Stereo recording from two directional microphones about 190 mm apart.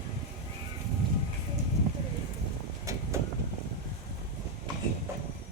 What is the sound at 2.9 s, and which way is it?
Vehicle, 15° right (ahead or behind).